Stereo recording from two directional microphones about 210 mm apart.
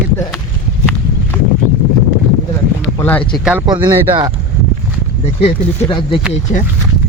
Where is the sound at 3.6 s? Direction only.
15° right (ahead or behind).